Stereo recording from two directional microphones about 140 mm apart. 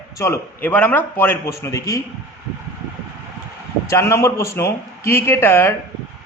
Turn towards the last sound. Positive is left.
turn(degrees=15)  # may be behind; listen again after turning